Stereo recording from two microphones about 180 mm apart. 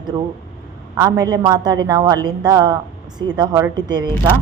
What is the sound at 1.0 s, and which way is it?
A woman's voice, 20° right (ahead or behind).